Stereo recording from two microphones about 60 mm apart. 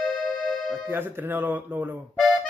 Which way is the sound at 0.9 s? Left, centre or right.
Right.